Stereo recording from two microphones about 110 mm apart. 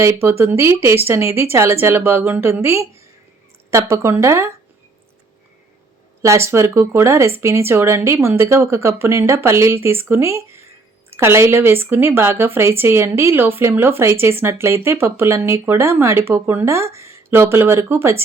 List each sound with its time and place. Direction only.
0.0 s a woman's voice: 25° right (ahead or behind)
6.2 s a woman's voice: 25° right (ahead or behind)